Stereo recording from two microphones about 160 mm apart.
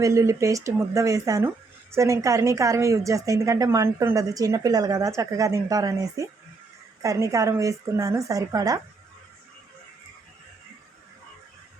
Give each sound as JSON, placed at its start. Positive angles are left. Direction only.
{"t": 0.0, "sound": "speech", "side_deg": -20}